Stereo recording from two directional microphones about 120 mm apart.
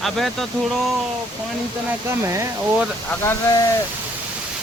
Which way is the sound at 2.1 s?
25° right (ahead or behind).